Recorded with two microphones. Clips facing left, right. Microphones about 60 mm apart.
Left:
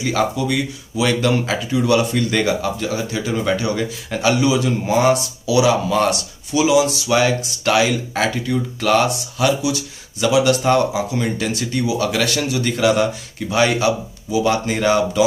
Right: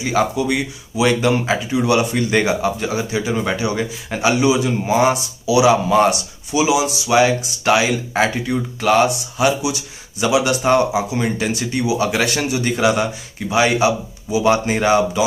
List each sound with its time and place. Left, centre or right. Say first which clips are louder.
0.0 s speech: right 1 dB; centre